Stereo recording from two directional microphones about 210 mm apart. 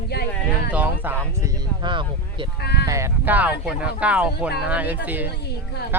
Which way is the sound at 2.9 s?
10° right (ahead or behind).